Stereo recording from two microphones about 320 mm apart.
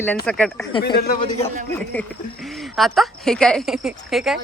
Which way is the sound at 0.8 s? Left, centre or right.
Left.